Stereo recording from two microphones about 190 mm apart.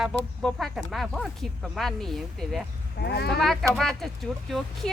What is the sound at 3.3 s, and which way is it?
Speech, centre (ahead or behind).